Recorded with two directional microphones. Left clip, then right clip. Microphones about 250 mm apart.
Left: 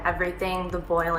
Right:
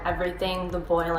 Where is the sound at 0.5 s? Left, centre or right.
Centre.